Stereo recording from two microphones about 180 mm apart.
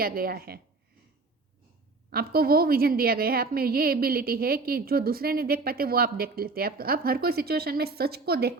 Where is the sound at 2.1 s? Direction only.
60° right (ahead or behind).